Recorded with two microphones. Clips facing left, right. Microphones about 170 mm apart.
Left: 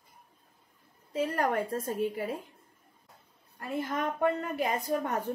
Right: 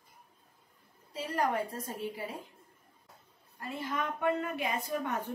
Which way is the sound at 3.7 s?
45° left (ahead or behind).